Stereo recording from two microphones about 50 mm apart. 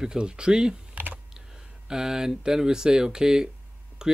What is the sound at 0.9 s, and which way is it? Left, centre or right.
Typing, right.